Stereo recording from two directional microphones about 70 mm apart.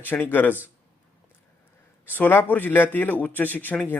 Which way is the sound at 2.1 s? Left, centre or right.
Left.